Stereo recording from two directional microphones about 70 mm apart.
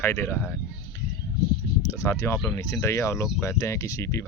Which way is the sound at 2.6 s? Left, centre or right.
Left.